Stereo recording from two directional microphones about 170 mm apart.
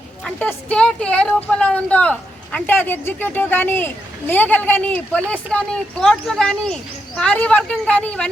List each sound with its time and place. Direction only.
0.3 s speech: 5° left (ahead or behind)